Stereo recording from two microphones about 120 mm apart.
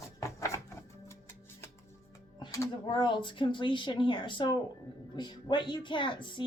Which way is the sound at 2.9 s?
40° left (ahead or behind).